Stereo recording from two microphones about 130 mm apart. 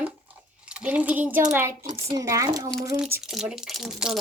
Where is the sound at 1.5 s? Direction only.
20° right (ahead or behind).